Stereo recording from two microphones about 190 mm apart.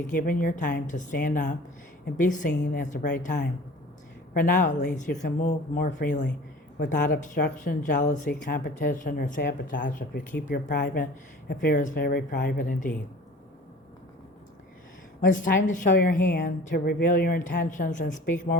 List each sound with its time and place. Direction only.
0.1 s speech: 45° left (ahead or behind)
15.2 s speech: 45° left (ahead or behind)